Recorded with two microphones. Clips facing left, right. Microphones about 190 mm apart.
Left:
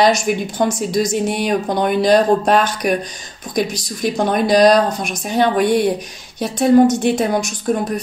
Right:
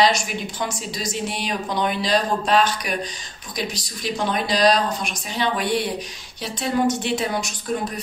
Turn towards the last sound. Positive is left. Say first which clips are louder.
# left 7 dB
turn(degrees=45)  # may be behind; listen again after turning